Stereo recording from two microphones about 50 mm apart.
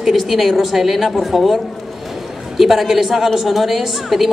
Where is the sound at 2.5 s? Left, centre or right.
Centre.